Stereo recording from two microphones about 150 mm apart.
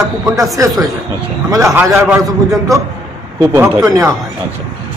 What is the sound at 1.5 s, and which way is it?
Speech, 20° right (ahead or behind).